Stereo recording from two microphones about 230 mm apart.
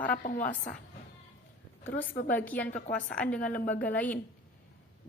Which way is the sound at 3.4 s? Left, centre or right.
Left.